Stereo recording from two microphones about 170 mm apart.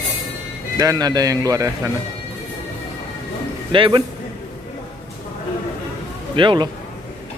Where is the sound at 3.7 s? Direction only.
30° right (ahead or behind).